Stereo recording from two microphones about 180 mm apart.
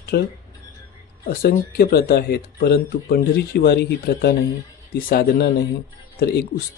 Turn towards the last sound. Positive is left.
turn(degrees=65)  # may be behind; listen again after turning